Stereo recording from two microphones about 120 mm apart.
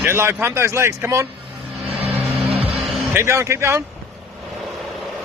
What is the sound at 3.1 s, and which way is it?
Speech, 20° right (ahead or behind).